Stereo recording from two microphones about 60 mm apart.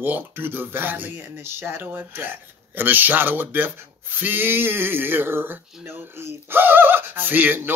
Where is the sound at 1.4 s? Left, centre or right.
Right.